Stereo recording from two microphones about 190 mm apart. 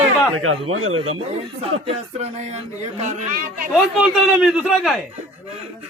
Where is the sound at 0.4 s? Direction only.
90° right.